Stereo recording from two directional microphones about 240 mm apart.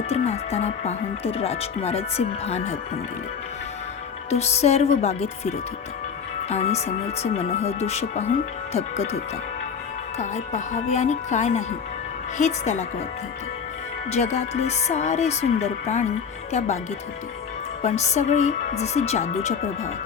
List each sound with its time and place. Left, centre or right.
0.1 s speech: left
4.3 s speech: left
6.5 s speech: left
14.1 s speech: left
17.8 s speech: left